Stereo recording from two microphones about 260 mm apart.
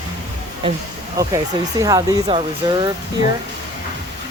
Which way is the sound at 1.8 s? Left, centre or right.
Centre.